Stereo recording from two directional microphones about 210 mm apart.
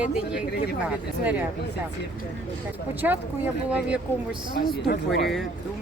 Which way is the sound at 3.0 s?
10° right (ahead or behind).